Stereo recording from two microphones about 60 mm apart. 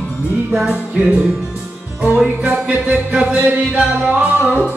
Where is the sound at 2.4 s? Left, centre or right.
Right.